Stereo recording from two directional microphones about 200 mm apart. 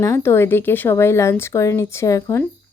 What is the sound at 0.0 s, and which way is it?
Speech, 15° left (ahead or behind).